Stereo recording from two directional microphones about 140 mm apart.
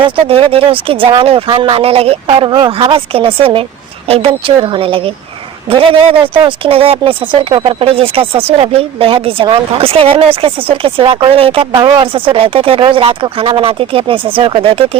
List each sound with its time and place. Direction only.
0.0 s speech: 40° right (ahead or behind)